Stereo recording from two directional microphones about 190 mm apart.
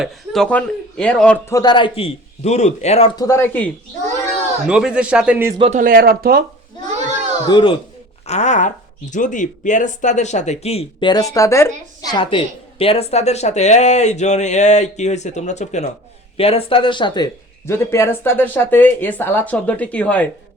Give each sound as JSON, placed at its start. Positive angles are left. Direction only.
{"t": 0.0, "sound": "a man's voice", "side_deg": 0}
{"t": 3.2, "sound": "speech", "side_deg": 15}
{"t": 4.7, "sound": "a man's voice", "side_deg": -5}
{"t": 5.5, "sound": "speech", "side_deg": -30}
{"t": 5.8, "sound": "speech", "side_deg": -50}
{"t": 7.4, "sound": "a man's voice", "side_deg": 25}
{"t": 8.3, "sound": "speech", "side_deg": 40}
{"t": 12.1, "sound": "a man's voice", "side_deg": 25}
{"t": 17.7, "sound": "speech", "side_deg": 15}